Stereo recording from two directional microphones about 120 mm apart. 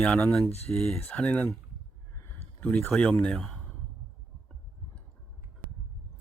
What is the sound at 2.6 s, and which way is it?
Speech, 10° left (ahead or behind).